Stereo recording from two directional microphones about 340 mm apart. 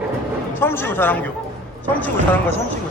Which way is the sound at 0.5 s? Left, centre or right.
Centre.